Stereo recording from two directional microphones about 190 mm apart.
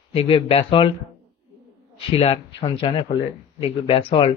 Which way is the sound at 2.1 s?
30° left (ahead or behind).